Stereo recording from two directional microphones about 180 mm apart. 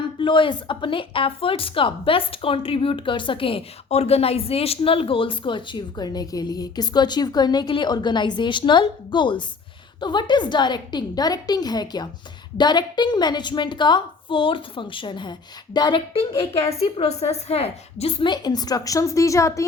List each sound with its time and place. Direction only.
0.2 s speech: 30° left (ahead or behind)